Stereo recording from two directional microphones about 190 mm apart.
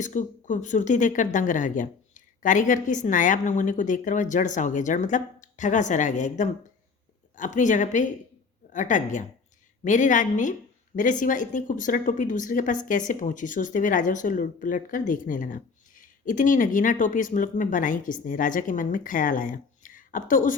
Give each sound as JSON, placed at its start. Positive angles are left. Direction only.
{"t": 0.0, "sound": "speech", "side_deg": 40}